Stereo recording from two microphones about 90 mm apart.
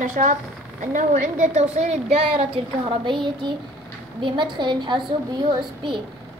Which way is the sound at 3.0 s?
60° right (ahead or behind).